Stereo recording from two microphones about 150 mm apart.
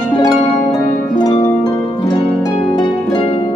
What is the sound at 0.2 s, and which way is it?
Harp, 25° left (ahead or behind).